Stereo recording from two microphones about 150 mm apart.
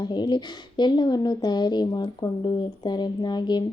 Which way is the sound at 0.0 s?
30° left (ahead or behind).